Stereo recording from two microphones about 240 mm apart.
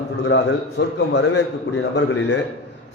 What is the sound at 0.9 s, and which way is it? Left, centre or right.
Speech, left.